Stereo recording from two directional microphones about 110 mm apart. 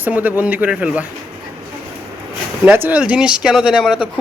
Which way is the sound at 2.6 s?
15° right (ahead or behind).